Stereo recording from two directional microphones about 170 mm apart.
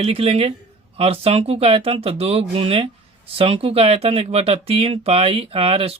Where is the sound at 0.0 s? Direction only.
35° right (ahead or behind).